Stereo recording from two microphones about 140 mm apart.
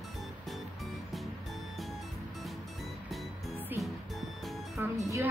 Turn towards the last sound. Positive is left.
turn(degrees=-20)  # may be behind; listen again after turning